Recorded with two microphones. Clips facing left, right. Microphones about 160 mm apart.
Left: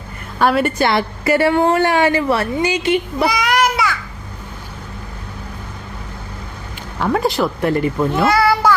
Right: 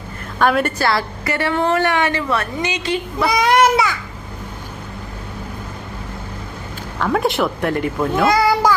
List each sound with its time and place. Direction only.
0.3 s a woman's voice: 5° left (ahead or behind)
0.8 s a woman's voice: 25° left (ahead or behind)
3.2 s a sound: 25° right (ahead or behind)
7.1 s speech: centre (ahead or behind)
8.1 s a child's voice: 15° right (ahead or behind)